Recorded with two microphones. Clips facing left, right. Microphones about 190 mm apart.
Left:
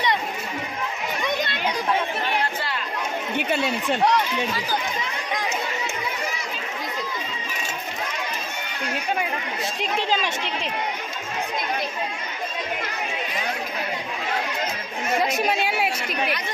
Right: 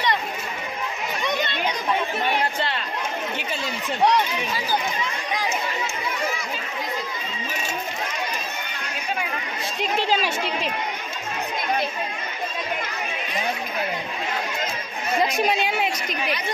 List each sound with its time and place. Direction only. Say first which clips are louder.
3.3 s speech: left 6 dB; 65° left (ahead or behind)
9.8 s a woman's voice: right 3 dB; 5° right (ahead or behind)
15.2 s a woman's voice: right 1 dB; 5° left (ahead or behind)